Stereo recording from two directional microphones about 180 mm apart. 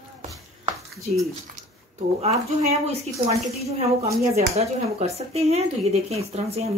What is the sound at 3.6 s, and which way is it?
Speech, 35° right (ahead or behind).